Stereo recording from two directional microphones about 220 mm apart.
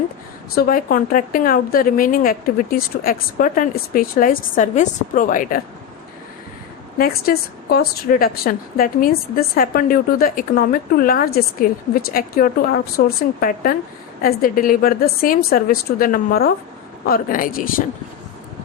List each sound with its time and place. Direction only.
0.5 s a woman's voice: 40° left (ahead or behind)
7.0 s a woman's voice: 45° left (ahead or behind)